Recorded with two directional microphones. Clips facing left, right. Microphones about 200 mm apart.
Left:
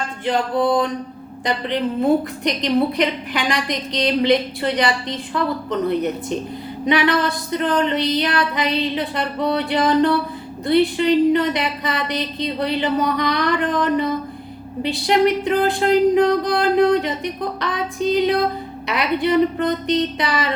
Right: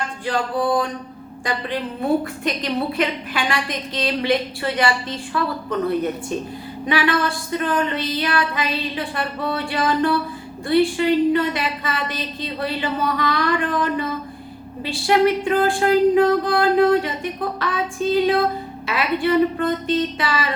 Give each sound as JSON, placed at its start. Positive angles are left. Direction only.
{"t": 1.5, "sound": "a woman's voice", "side_deg": 20}